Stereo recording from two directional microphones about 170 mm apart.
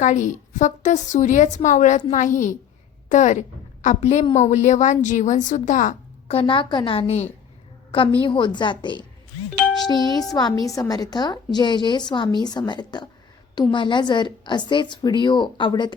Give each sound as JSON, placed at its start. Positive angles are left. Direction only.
{"t": 0.0, "sound": "a woman's voice", "side_deg": 45}